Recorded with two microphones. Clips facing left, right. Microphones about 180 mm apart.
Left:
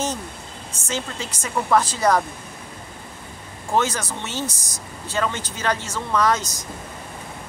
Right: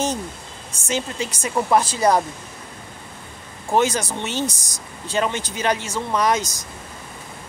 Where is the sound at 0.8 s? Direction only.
15° right (ahead or behind).